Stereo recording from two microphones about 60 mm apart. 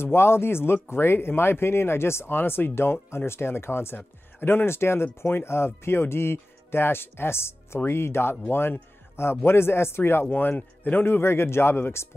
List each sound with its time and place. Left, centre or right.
0.0 s speech: left
10.3 s speech: left